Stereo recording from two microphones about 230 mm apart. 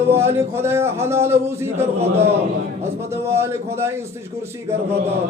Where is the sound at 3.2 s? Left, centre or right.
Centre.